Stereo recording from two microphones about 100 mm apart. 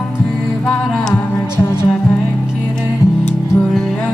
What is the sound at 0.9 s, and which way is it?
Music, 5° left (ahead or behind).